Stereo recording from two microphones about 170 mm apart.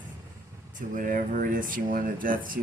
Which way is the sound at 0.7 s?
50° right (ahead or behind).